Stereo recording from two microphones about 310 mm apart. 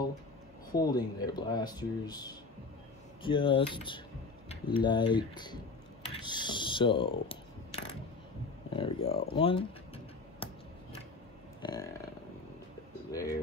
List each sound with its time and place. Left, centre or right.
0.7 s speech: centre
6.1 s coin: centre
8.6 s speech: centre
11.6 s burping: centre
13.1 s speech: centre